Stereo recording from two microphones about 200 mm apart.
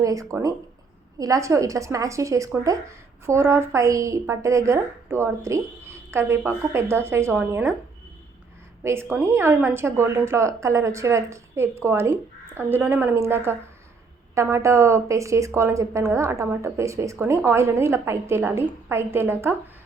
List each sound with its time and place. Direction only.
0.0 s a woman's voice: 15° right (ahead or behind)
8.8 s a woman's voice: 10° right (ahead or behind)